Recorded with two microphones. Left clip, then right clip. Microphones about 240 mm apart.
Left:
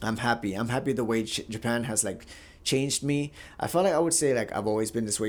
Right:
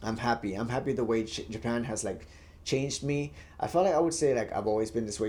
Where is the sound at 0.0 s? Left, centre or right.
Left.